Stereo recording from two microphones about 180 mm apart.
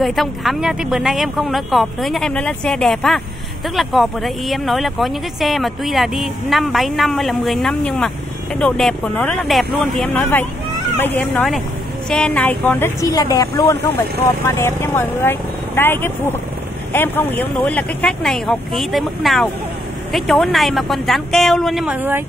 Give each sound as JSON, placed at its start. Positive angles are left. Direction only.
{"t": 0.0, "sound": "a woman's voice", "side_deg": 0}